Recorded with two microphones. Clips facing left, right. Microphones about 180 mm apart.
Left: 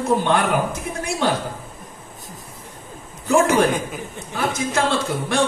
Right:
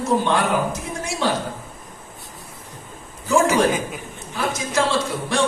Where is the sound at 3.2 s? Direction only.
60° left (ahead or behind).